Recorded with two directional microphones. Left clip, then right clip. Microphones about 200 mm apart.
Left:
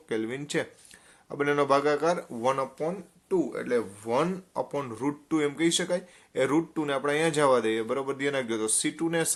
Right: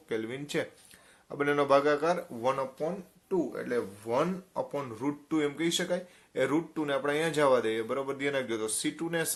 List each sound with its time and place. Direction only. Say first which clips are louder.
0.1 s speech: left 3 dB; 25° left (ahead or behind)